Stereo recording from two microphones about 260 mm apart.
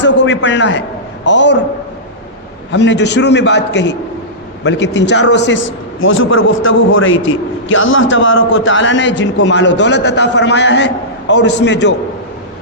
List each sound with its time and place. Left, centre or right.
0.0 s a man's voice: left
2.7 s a man's voice: left